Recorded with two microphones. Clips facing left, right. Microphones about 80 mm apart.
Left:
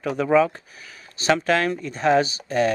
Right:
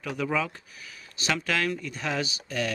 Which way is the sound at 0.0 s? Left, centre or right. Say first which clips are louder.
Left 10 dB; left.